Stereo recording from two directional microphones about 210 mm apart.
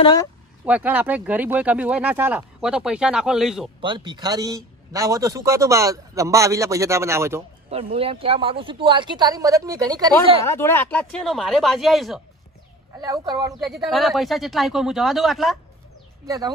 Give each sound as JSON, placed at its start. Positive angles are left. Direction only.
{"t": 0.0, "sound": "speech", "side_deg": 20}
{"t": 0.7, "sound": "a man's voice", "side_deg": -5}
{"t": 3.8, "sound": "a man's voice", "side_deg": -20}
{"t": 7.7, "sound": "speech", "side_deg": -30}
{"t": 10.4, "sound": "speech", "side_deg": 10}
{"t": 13.0, "sound": "a man's voice", "side_deg": -20}
{"t": 13.7, "sound": "speech", "side_deg": 0}
{"t": 16.3, "sound": "a man's voice", "side_deg": -15}